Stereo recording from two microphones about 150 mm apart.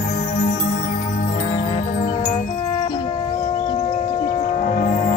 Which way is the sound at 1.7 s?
55° left (ahead or behind).